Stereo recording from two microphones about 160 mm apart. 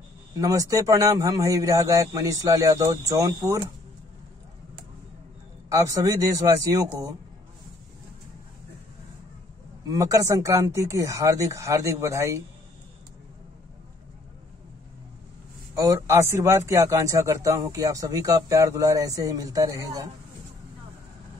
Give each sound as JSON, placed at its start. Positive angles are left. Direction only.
{"t": 0.4, "sound": "a man's voice", "side_deg": -20}
{"t": 5.7, "sound": "a man's voice", "side_deg": -20}
{"t": 9.8, "sound": "a man's voice", "side_deg": -20}
{"t": 15.8, "sound": "a man's voice", "side_deg": -20}